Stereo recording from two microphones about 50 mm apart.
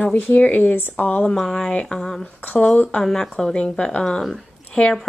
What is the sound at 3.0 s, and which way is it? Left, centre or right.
A woman's voice, centre.